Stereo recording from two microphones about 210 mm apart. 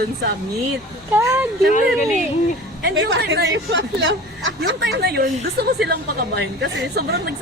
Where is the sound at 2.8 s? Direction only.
60° right (ahead or behind).